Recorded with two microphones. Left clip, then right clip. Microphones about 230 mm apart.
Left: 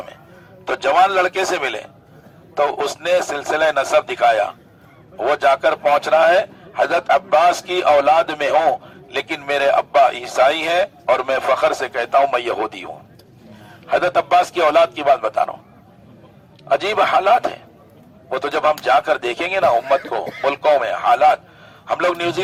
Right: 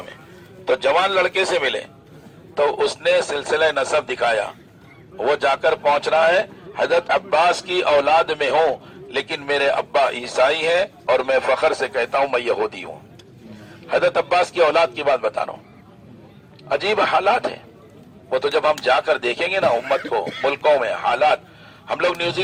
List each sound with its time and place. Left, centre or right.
0.6 s a man's voice: left
16.6 s a man's voice: left